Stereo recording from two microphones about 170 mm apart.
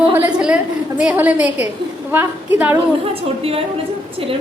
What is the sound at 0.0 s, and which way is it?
A woman's voice, 10° right (ahead or behind).